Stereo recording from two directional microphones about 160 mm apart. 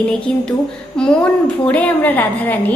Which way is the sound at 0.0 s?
5° left (ahead or behind).